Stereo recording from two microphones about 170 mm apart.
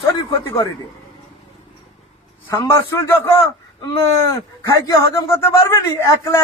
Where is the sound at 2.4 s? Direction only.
15° left (ahead or behind).